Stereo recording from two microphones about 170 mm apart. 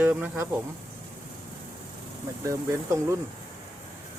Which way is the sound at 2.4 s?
20° right (ahead or behind).